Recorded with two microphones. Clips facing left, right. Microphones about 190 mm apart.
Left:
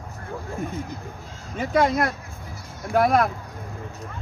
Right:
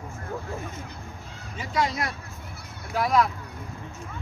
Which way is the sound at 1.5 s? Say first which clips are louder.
Left 7 dB; 55° left (ahead or behind).